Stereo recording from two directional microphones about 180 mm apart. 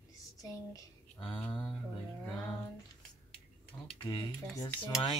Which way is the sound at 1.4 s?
10° left (ahead or behind).